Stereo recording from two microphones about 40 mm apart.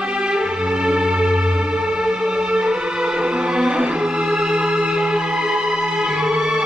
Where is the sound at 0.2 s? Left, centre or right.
Right.